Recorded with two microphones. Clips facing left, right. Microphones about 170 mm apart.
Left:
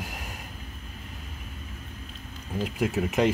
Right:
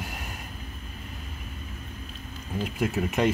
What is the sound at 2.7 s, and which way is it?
Speech, 15° left (ahead or behind).